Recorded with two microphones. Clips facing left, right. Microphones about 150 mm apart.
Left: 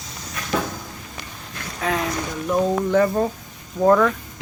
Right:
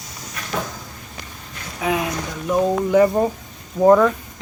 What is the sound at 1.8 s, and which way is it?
Speech, 10° right (ahead or behind).